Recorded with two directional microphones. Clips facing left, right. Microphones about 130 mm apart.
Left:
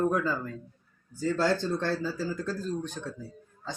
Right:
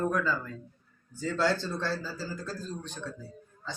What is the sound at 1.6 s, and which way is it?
A man's voice, 55° left (ahead or behind).